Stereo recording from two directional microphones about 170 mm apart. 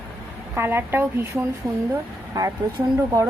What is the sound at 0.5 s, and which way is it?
A woman's voice, 15° right (ahead or behind).